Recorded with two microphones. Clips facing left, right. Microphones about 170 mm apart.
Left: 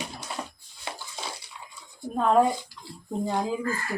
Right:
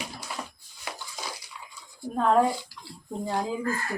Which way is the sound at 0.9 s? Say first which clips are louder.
Left 1 dB; 25° left (ahead or behind).